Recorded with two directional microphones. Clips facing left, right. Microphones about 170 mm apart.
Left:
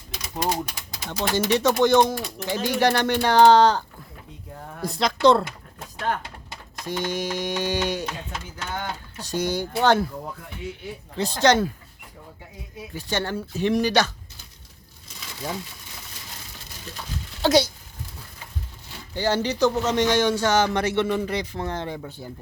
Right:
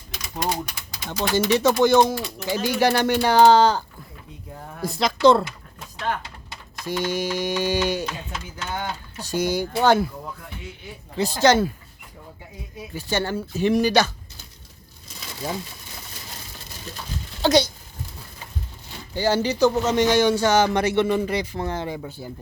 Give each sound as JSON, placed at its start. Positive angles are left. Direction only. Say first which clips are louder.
{"t": 0.5, "sound": "speech", "louder": "left 1 dB", "side_deg": 40}
{"t": 1.3, "sound": "speech", "louder": "right 2 dB", "side_deg": -5}
{"t": 6.0, "sound": "pigeon", "louder": "even", "side_deg": 50}
{"t": 7.0, "sound": "a man's voice", "louder": "right 2 dB", "side_deg": -5}
{"t": 11.1, "sound": "speech", "louder": "right 2 dB", "side_deg": -5}
{"t": 12.7, "sound": "speech", "louder": "right 2 dB", "side_deg": -5}
{"t": 17.4, "sound": "speech", "louder": "right 1 dB", "side_deg": 5}
{"t": 19.1, "sound": "a man's voice", "louder": "right 2 dB", "side_deg": -5}